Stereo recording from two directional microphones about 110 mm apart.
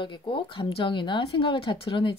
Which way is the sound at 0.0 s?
50° left (ahead or behind).